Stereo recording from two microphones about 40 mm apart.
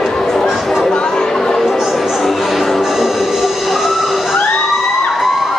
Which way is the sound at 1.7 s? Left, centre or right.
Centre.